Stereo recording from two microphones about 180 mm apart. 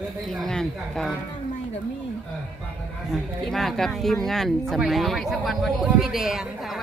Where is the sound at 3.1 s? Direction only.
Centre (ahead or behind).